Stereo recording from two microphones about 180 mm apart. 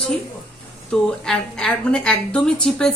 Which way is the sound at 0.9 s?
5° left (ahead or behind).